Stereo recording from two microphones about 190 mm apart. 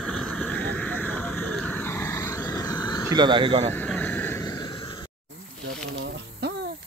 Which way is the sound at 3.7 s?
10° left (ahead or behind).